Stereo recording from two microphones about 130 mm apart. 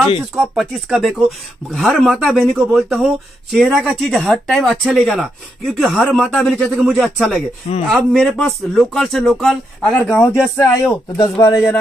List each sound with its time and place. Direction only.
0.4 s speech: centre (ahead or behind)
10.0 s speech: 20° left (ahead or behind)